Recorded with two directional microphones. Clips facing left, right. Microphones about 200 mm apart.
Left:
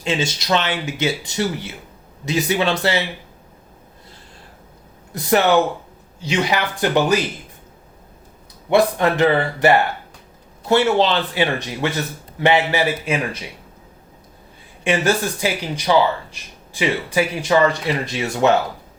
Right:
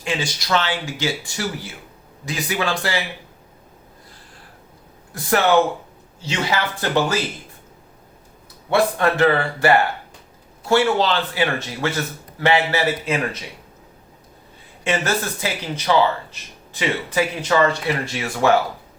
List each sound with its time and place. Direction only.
0.0 s speech: 25° left (ahead or behind)
5.1 s speech: 20° left (ahead or behind)
8.7 s speech: 15° left (ahead or behind)
14.8 s speech: 15° left (ahead or behind)